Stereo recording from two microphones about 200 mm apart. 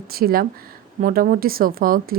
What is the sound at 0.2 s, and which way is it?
Speech, 50° right (ahead or behind).